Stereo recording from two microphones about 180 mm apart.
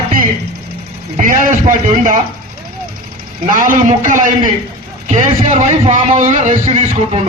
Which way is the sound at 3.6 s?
45° right (ahead or behind).